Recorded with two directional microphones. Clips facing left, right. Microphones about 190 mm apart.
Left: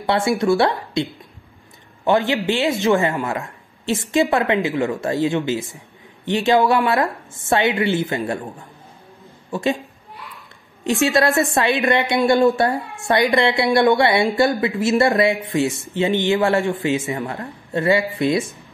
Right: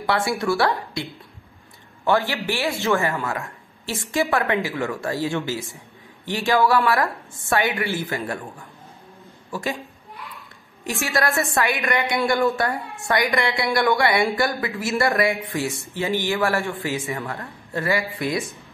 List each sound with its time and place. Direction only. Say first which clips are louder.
0.0 s speech: left 4 dB; 20° left (ahead or behind)
2.0 s speech: left 4 dB; 20° left (ahead or behind)
9.5 s a woman's voice: left 7 dB; 20° left (ahead or behind)
10.8 s speech: left 7 dB; 20° left (ahead or behind)